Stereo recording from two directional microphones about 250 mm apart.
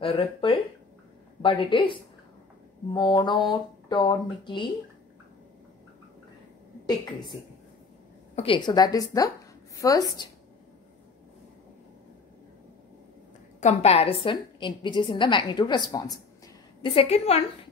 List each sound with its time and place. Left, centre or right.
0.0 s a woman's voice: left
8.4 s speech: centre
13.6 s a woman's voice: left